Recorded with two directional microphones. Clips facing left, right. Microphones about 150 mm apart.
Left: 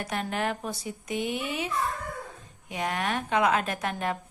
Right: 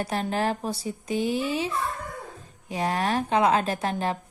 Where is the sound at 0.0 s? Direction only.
35° right (ahead or behind).